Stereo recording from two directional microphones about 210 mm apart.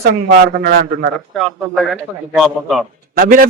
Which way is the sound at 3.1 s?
40° right (ahead or behind).